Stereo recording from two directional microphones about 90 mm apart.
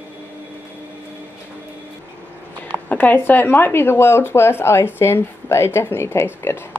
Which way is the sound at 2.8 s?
20° left (ahead or behind).